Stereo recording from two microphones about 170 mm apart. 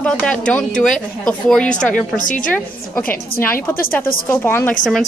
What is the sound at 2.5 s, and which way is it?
A woman's voice, 10° left (ahead or behind).